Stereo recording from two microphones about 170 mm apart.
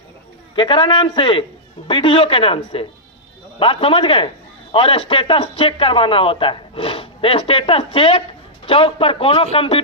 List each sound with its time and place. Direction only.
0.5 s a man's voice: 30° left (ahead or behind)